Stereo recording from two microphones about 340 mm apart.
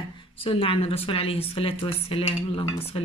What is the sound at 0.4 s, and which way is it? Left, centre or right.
Speech, centre.